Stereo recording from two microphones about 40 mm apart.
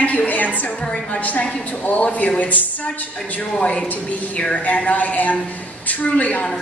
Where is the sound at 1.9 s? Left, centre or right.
Left.